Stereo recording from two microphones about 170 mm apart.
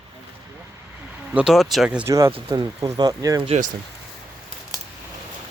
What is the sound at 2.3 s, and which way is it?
Speech, 30° right (ahead or behind).